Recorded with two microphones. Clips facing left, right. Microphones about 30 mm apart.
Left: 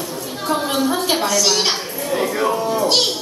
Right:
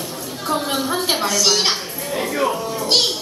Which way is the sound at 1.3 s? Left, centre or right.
Right.